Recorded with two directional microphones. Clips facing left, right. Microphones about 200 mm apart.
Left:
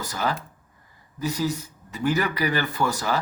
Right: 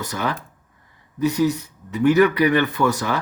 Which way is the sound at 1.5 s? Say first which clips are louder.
Right 5 dB; 65° right (ahead or behind).